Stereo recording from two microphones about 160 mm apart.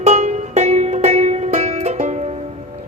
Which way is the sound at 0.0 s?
45° right (ahead or behind).